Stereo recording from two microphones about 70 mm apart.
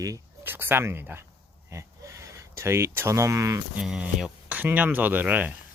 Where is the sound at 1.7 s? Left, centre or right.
Right.